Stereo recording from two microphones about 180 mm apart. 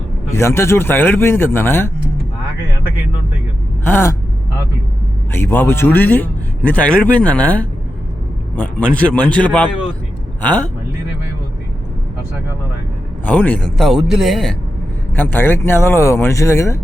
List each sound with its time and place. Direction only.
0.3 s a man's voice: 15° left (ahead or behind)
3.8 s a man's voice: 15° left (ahead or behind)
5.3 s a man's voice: 10° left (ahead or behind)
13.2 s speech: 10° left (ahead or behind)
15.1 s a man's voice: 10° left (ahead or behind)